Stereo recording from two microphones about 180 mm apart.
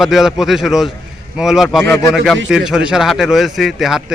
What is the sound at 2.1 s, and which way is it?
Speech, centre (ahead or behind).